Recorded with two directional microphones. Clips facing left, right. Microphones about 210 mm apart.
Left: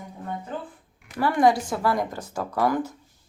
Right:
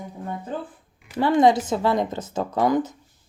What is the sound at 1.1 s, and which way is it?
Speech, 25° right (ahead or behind).